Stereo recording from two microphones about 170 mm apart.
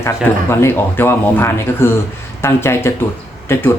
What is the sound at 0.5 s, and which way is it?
Speech, 15° left (ahead or behind).